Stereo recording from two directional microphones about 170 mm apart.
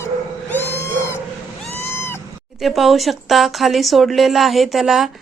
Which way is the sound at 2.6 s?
Centre (ahead or behind).